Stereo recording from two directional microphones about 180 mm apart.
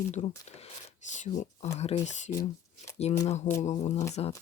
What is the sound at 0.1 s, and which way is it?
Speech, 40° left (ahead or behind).